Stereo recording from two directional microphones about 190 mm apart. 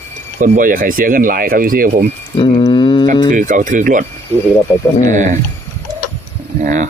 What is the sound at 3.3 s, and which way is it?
Speech, 45° right (ahead or behind).